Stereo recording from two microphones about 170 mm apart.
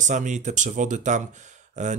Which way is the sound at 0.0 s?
45° right (ahead or behind).